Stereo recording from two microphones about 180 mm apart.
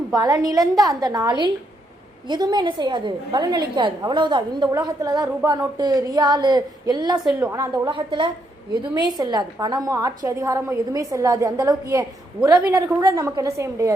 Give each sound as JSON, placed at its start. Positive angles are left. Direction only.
{"t": 0.1, "sound": "a woman's voice", "side_deg": -20}
{"t": 7.3, "sound": "a woman's voice", "side_deg": -5}
{"t": 7.5, "sound": "a woman's voice", "side_deg": -25}